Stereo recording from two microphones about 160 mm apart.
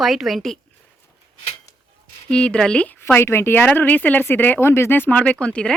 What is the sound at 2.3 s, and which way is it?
A woman's voice, 5° left (ahead or behind).